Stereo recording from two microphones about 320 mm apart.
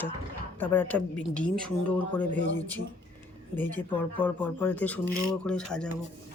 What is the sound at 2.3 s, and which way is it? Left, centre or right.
Speech, right.